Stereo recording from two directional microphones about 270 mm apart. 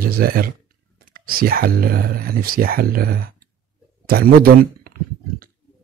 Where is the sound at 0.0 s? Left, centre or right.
Right.